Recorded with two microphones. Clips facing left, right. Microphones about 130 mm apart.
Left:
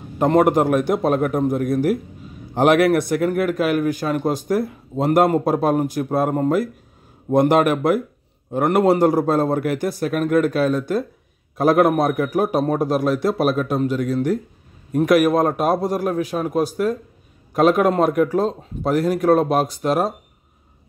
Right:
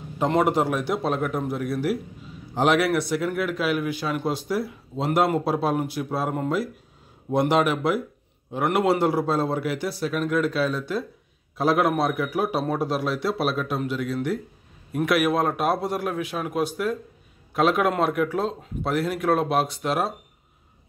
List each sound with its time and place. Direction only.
0.2 s a man's voice: 50° left (ahead or behind)